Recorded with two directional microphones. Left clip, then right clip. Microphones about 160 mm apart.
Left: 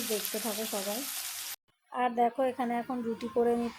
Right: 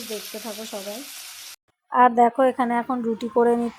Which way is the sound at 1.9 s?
35° right (ahead or behind).